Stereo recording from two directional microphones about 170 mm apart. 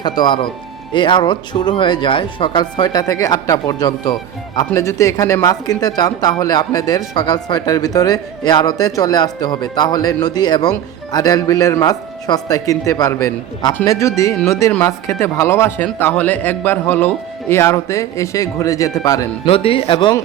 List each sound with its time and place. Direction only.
0.0 s speech: 25° left (ahead or behind)
19.5 s speech: 35° left (ahead or behind)